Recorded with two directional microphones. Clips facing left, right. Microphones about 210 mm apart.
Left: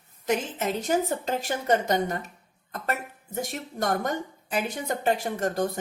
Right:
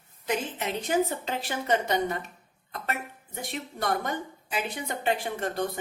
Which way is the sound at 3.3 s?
45° left (ahead or behind).